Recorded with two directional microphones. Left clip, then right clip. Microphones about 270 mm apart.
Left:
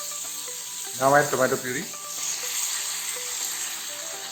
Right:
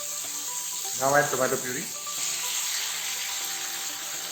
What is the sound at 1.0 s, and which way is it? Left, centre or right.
Speech, left.